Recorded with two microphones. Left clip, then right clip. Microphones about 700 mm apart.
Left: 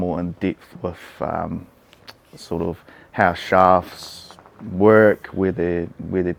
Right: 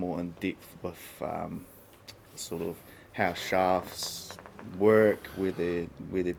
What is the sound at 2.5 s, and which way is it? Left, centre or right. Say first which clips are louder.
Speech: left 11 dB; left.